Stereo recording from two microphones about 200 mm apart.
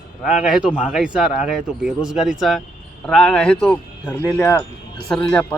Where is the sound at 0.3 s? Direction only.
Centre (ahead or behind).